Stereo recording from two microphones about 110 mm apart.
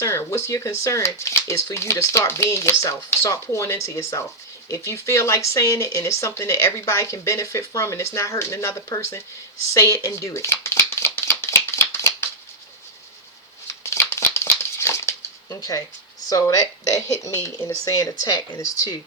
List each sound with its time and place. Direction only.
0.0 s speech: 25° left (ahead or behind)
9.7 s shuffling cards: 25° left (ahead or behind)
13.8 s crumpling: 25° left (ahead or behind)
16.3 s speech: 30° left (ahead or behind)